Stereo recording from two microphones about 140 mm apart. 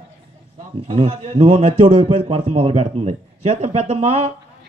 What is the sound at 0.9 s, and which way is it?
A man's voice, 45° right (ahead or behind).